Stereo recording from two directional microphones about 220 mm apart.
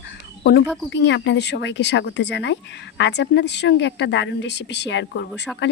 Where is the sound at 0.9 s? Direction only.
55° left (ahead or behind).